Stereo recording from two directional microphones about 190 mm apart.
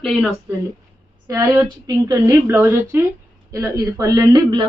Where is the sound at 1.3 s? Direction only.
15° right (ahead or behind).